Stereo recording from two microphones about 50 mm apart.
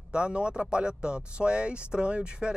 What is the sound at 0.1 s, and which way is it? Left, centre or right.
Speech, right.